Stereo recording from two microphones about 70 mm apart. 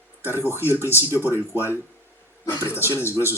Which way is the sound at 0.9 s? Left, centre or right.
Left.